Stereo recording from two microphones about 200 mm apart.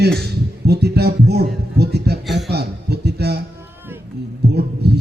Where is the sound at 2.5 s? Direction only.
55° right (ahead or behind).